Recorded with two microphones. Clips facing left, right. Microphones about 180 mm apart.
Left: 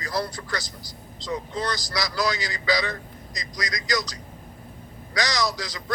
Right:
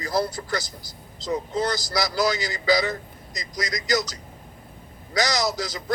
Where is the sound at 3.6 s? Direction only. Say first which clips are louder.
Right 3 dB; 25° right (ahead or behind).